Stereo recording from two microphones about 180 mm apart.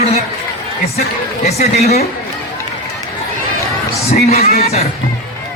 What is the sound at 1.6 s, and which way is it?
Speech, 35° left (ahead or behind).